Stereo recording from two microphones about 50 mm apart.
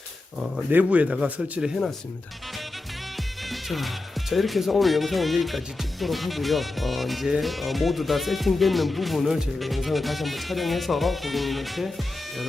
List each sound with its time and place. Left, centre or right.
0.7 s speech: right
3.5 s music: centre
4.3 s speech: centre